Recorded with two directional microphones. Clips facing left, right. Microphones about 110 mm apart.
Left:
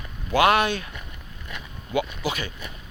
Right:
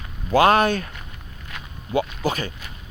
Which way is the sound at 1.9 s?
40° right (ahead or behind).